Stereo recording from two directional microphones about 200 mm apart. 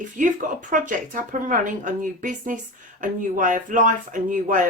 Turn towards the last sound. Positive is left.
turn(degrees=-40)  # may be behind; listen again after turning